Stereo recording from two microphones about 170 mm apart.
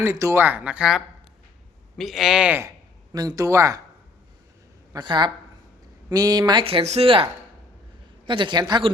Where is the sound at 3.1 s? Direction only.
20° right (ahead or behind).